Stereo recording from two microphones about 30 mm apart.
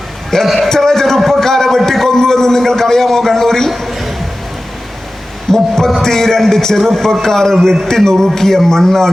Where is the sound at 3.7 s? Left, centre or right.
Centre.